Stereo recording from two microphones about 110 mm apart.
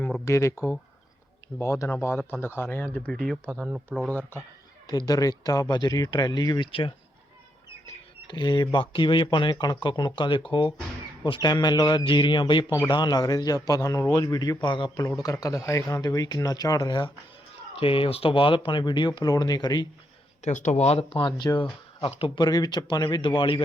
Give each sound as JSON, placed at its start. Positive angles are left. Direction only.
{"t": 0.3, "sound": "speech", "side_deg": 25}
{"t": 1.5, "sound": "speech", "side_deg": 30}
{"t": 3.1, "sound": "speech", "side_deg": 0}
{"t": 3.6, "sound": "speech", "side_deg": -15}
{"t": 4.9, "sound": "speech", "side_deg": 35}
{"t": 6.7, "sound": "speech", "side_deg": 55}
{"t": 8.3, "sound": "speech", "side_deg": 45}
{"t": 17.7, "sound": "speech", "side_deg": 55}
{"t": 20.4, "sound": "speech", "side_deg": 90}
{"t": 21.2, "sound": "speech", "side_deg": 45}
{"t": 22.4, "sound": "speech", "side_deg": 40}